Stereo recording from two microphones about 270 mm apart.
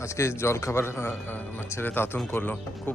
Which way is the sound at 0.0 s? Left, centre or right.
Centre.